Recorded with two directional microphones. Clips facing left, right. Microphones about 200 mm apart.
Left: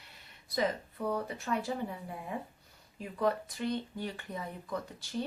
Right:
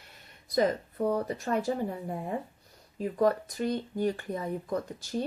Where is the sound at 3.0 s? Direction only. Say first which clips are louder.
Right 6 dB; 45° right (ahead or behind).